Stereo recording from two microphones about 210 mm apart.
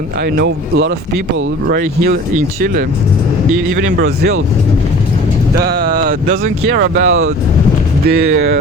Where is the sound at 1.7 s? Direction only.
45° right (ahead or behind).